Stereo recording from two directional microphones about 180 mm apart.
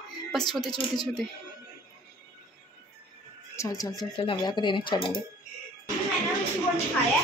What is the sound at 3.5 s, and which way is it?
Speech, 20° left (ahead or behind).